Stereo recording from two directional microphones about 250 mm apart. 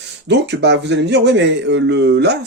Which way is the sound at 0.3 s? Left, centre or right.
Right.